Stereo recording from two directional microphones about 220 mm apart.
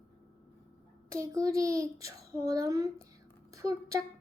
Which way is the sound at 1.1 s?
15° right (ahead or behind).